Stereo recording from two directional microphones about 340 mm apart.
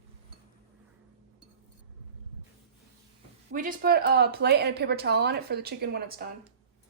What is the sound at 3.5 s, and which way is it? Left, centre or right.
Speech, right.